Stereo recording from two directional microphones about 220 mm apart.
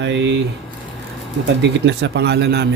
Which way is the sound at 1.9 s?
50° right (ahead or behind).